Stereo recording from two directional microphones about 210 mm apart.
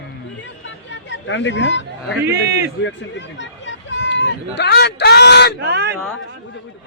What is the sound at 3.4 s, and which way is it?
Speech, 60° left (ahead or behind).